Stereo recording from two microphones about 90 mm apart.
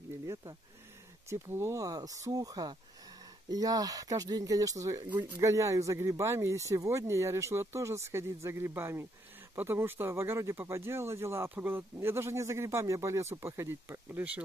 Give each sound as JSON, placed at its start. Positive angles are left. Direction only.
{"t": 1.3, "sound": "speech", "side_deg": -30}
{"t": 1.8, "sound": "speech", "side_deg": -40}